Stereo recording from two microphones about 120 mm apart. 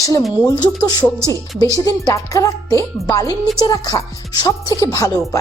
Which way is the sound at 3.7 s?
30° left (ahead or behind).